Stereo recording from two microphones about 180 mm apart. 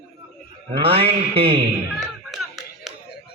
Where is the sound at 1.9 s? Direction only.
Centre (ahead or behind).